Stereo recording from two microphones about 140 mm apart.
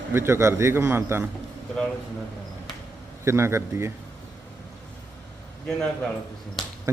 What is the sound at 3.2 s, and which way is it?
Speech, 20° right (ahead or behind).